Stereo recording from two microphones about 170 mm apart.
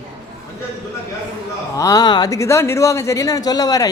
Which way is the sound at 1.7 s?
20° left (ahead or behind).